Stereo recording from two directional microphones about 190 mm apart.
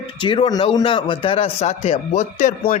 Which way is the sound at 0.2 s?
25° left (ahead or behind).